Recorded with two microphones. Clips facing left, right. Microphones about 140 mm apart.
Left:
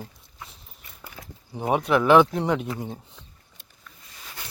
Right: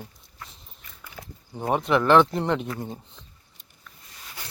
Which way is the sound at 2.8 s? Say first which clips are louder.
Left 1 dB; 5° left (ahead or behind).